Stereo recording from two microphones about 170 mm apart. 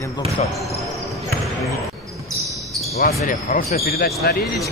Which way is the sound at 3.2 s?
50° left (ahead or behind).